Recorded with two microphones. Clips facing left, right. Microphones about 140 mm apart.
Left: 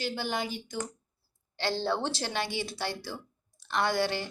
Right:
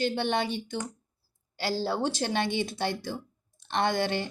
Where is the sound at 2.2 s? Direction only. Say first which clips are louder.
Right 5 dB; 20° right (ahead or behind).